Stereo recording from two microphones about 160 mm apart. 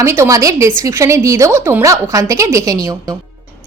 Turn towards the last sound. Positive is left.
turn(degrees=-20)  # may be behind; listen again after turning